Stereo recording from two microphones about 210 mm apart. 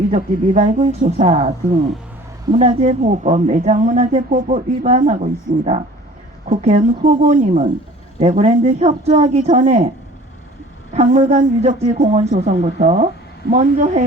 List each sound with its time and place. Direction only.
0.1 s speech: 35° right (ahead or behind)
2.5 s speech: 30° right (ahead or behind)
6.5 s speech: 35° right (ahead or behind)
10.9 s speech: 35° right (ahead or behind)